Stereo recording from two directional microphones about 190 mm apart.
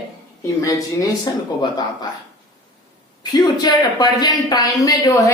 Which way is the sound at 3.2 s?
20° left (ahead or behind).